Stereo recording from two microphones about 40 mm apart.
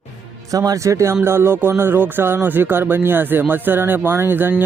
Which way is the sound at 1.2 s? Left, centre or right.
Right.